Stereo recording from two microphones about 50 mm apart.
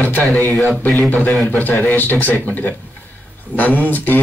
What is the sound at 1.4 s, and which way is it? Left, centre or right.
Speech, left.